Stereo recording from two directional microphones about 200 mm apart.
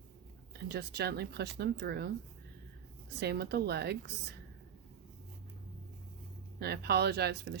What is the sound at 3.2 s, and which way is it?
Speech, 55° right (ahead or behind).